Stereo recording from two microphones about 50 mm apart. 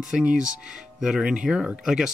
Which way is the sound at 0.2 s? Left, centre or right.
Centre.